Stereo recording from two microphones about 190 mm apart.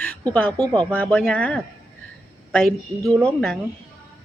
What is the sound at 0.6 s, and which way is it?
Speech, 20° right (ahead or behind).